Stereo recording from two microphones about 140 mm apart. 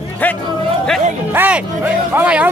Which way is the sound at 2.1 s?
10° right (ahead or behind).